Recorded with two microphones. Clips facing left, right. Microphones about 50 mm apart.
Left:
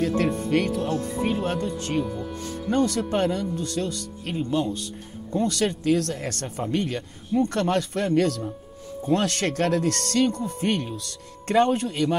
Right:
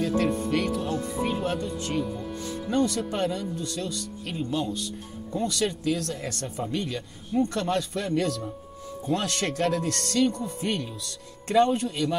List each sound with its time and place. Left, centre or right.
0.0 s speech: left